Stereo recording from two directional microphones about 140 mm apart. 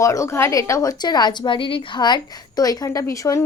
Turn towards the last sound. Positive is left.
turn(degrees=25)  # may be behind; listen again after turning